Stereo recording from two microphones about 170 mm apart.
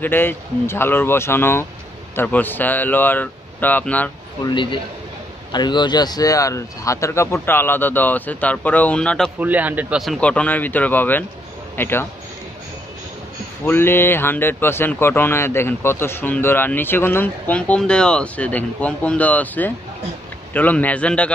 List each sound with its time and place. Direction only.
0.0 s a man's voice: 10° left (ahead or behind)
4.5 s a man's voice: 30° left (ahead or behind); by 9.3 s 5° left (ahead or behind)
9.4 s a man's voice: 10° right (ahead or behind); by 12.1 s 15° left (ahead or behind)
13.7 s a man's voice: 15° left (ahead or behind)